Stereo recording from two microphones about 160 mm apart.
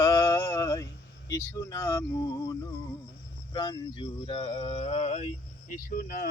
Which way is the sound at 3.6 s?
30° left (ahead or behind).